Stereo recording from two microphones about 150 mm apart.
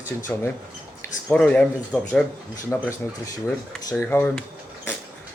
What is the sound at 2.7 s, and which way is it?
Speech, 20° left (ahead or behind).